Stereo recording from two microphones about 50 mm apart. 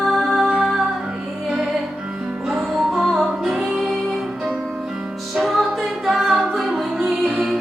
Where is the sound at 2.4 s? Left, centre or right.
Centre.